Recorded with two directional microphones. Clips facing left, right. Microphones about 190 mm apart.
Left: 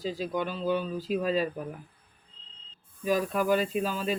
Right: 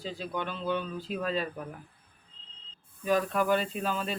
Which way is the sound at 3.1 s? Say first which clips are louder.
Left 1 dB; 10° left (ahead or behind).